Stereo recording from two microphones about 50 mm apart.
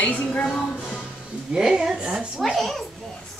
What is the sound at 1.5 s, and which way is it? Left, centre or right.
Speech, centre.